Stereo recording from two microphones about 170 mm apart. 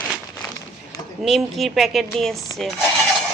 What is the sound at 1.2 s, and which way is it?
Speech, centre (ahead or behind).